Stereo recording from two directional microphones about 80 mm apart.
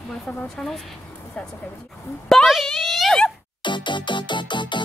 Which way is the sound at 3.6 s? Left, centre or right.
Left.